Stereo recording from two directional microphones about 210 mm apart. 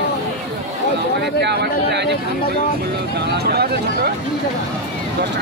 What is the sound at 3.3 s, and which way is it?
Vehicle, 50° right (ahead or behind).